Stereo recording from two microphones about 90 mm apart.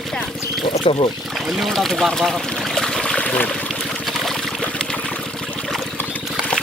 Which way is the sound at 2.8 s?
5° left (ahead or behind).